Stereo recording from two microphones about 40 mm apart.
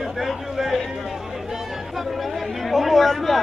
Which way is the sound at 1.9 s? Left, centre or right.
Centre.